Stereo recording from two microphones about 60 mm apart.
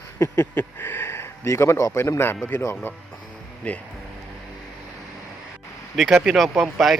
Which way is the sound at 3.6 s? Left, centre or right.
Left.